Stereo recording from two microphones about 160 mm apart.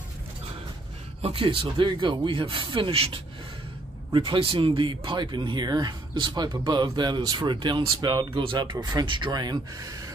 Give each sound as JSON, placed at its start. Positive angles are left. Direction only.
{"t": 1.2, "sound": "speech", "side_deg": -35}